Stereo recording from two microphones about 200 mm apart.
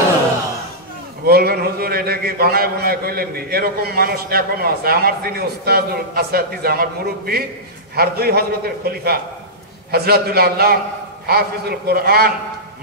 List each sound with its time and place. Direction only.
1.2 s a man's voice: 50° right (ahead or behind)